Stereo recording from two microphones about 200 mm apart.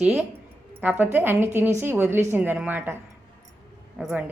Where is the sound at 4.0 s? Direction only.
Centre (ahead or behind).